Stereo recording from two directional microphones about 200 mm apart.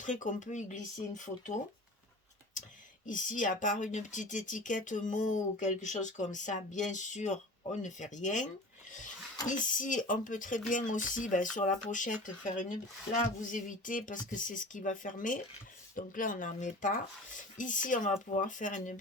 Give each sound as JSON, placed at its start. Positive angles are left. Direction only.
{"t": 0.0, "sound": "speech", "side_deg": 40}
{"t": 3.1, "sound": "speech", "side_deg": 40}
{"t": 9.5, "sound": "speech", "side_deg": 40}